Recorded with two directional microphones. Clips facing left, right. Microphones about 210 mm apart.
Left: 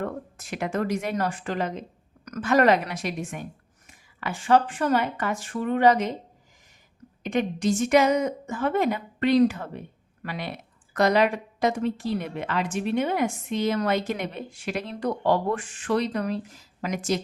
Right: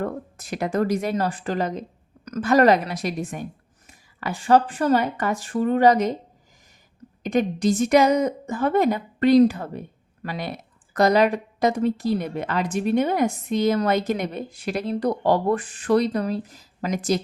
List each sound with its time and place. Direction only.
0.0 s a woman's voice: 40° right (ahead or behind)
7.2 s a woman's voice: 40° right (ahead or behind)